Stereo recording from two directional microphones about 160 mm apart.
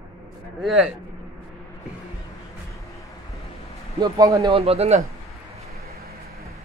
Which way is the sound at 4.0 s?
20° right (ahead or behind).